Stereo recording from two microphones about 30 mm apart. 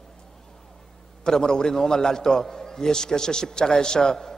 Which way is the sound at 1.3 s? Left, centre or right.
Left.